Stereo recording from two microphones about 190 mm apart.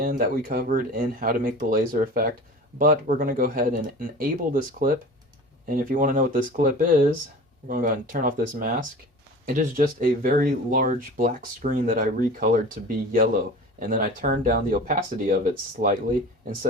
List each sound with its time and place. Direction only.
0.0 s speech: 45° right (ahead or behind)